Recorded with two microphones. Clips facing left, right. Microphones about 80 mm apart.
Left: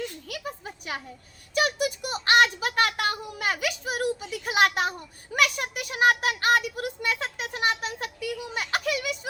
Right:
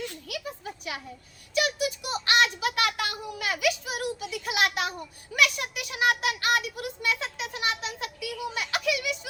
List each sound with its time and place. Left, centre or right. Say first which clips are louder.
1.5 s a child's voice: left 2 dB; left